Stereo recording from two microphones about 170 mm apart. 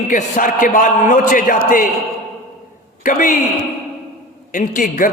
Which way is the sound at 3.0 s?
50° left (ahead or behind).